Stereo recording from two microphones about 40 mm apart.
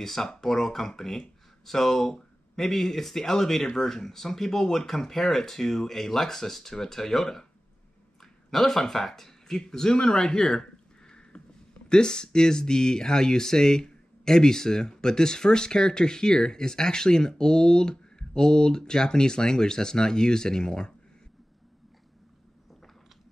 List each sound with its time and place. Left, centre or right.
0.0 s speech: centre